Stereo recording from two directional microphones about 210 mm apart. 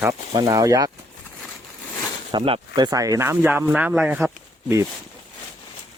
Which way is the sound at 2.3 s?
25° right (ahead or behind).